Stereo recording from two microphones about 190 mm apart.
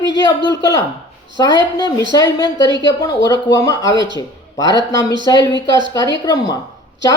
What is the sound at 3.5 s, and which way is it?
A man's voice, 20° left (ahead or behind).